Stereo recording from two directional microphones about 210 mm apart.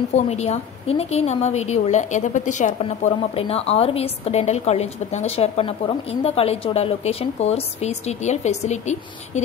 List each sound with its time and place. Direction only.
0.1 s a woman's voice: 30° left (ahead or behind)